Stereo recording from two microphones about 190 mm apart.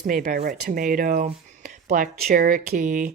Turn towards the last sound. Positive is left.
turn(degrees=-45)  # may be behind; listen again after turning